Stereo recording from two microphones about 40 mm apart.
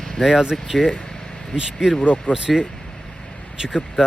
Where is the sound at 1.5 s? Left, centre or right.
Centre.